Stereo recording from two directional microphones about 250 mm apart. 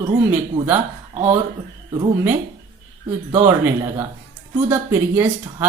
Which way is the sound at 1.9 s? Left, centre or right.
Centre.